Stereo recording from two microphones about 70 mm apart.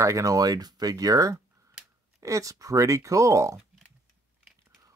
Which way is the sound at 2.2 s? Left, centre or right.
Right.